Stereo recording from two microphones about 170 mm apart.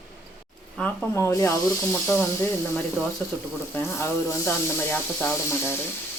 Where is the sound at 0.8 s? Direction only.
10° left (ahead or behind).